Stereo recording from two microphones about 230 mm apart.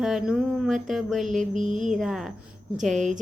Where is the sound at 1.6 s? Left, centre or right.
Right.